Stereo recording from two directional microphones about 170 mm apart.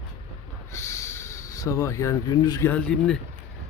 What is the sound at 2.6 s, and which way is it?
Speech, 5° left (ahead or behind).